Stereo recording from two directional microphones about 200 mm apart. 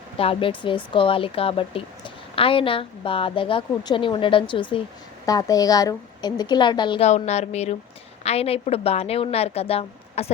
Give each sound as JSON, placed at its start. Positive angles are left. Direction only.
{"t": 0.2, "sound": "a woman's voice", "side_deg": 25}